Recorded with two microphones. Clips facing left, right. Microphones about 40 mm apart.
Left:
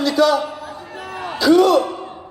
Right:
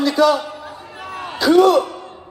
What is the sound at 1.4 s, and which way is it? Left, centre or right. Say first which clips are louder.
Speech: right 1 dB; right.